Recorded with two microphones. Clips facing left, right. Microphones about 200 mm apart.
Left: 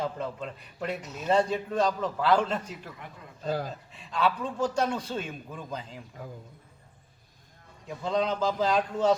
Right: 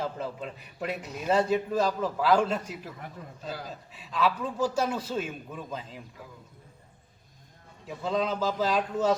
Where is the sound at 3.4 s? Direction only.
50° left (ahead or behind).